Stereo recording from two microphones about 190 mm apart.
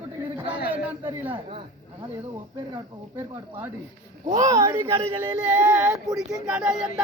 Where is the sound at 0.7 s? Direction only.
10° right (ahead or behind).